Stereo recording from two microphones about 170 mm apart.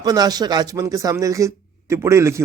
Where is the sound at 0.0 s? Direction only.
25° right (ahead or behind).